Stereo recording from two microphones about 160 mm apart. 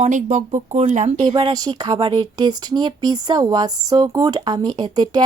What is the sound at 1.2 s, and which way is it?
A woman's voice, 25° right (ahead or behind).